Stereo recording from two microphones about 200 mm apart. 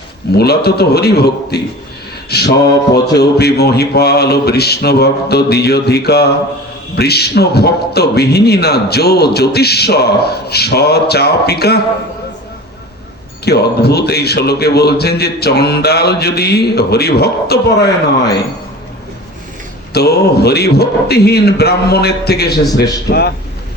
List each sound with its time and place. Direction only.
0.3 s a man's voice: 55° left (ahead or behind)
13.4 s a man's voice: 55° left (ahead or behind)
19.9 s a man's voice: 55° left (ahead or behind)